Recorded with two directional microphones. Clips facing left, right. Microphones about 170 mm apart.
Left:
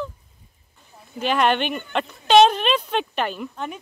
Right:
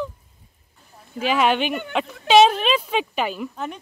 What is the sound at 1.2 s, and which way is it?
Speech, 5° right (ahead or behind).